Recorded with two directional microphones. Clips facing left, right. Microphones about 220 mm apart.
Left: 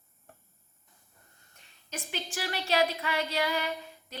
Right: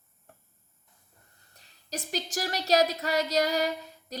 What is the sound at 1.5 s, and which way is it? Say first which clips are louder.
A woman's voice: right 4 dB; 35° right (ahead or behind).